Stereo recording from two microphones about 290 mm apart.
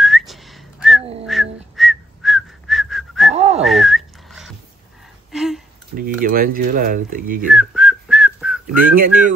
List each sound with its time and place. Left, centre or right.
0.0 s whistling: centre
3.3 s whistling: right
3.6 s whistling: centre
5.3 s a sound: centre
5.9 s speech: right
7.4 s whistling: centre
8.6 s speech: right